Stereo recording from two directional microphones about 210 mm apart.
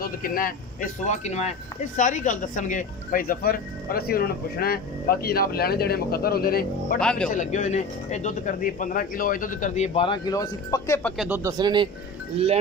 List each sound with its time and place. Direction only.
0.0 s speech: 40° left (ahead or behind)
7.0 s speech: 5° left (ahead or behind)
7.2 s speech: 35° left (ahead or behind); by 11.0 s 15° left (ahead or behind)
11.0 s speech: 5° left (ahead or behind)
11.2 s speech: 10° right (ahead or behind)